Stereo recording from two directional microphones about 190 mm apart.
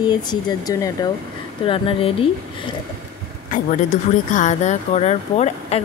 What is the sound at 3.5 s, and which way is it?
Speech, 45° left (ahead or behind).